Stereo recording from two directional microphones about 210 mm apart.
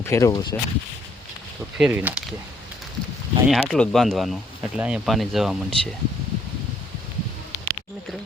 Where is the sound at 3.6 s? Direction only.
5° left (ahead or behind).